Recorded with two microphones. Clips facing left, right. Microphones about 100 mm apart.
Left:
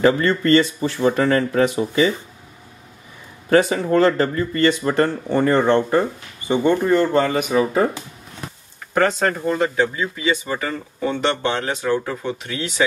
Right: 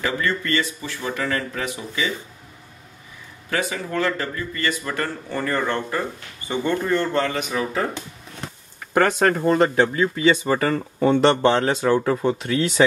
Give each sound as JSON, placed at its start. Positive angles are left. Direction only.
{"t": 0.0, "sound": "speech", "side_deg": 35}
{"t": 3.4, "sound": "speech", "side_deg": 35}
{"t": 9.6, "sound": "speech", "side_deg": -50}
{"t": 11.6, "sound": "speech", "side_deg": -35}